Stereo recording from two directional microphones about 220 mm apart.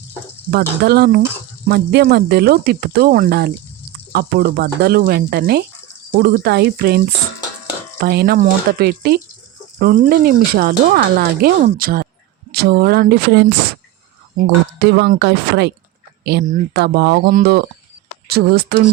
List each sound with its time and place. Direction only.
0.5 s speech: 45° right (ahead or behind)